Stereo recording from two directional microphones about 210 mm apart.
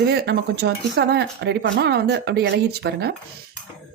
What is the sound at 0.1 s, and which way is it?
Speech, 50° right (ahead or behind).